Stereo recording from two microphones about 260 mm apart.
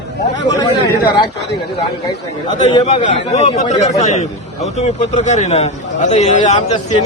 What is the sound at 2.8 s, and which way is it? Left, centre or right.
A man's voice, left.